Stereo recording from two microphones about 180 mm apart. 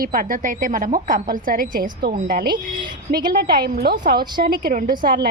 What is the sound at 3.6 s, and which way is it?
A woman's voice, 60° right (ahead or behind).